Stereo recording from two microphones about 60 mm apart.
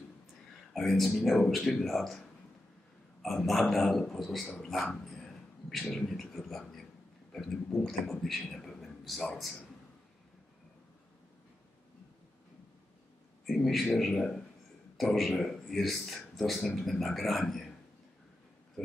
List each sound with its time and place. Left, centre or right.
0.7 s a man's voice: centre
13.5 s a man's voice: centre